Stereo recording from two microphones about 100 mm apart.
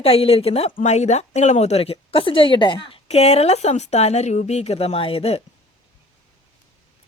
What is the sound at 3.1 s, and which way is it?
A woman's voice, 90° left.